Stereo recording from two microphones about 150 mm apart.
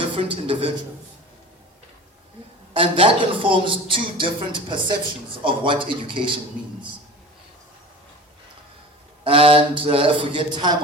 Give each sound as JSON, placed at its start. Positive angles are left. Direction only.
{"t": 0.2, "sound": "a woman's voice", "side_deg": -35}
{"t": 2.7, "sound": "a woman's voice", "side_deg": -35}
{"t": 9.2, "sound": "a woman's voice", "side_deg": -35}